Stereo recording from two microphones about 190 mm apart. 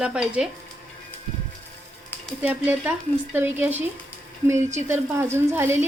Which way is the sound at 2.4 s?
10° right (ahead or behind).